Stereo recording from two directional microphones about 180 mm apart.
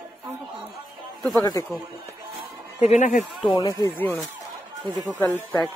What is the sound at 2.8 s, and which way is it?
Speech, 45° left (ahead or behind).